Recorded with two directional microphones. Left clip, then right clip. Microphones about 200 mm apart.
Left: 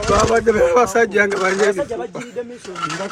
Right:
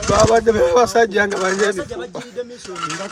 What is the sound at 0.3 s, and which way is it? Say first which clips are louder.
Speech: right 1 dB; 60° right (ahead or behind).